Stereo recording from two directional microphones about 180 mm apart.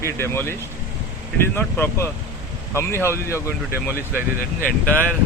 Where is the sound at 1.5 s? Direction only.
10° left (ahead or behind).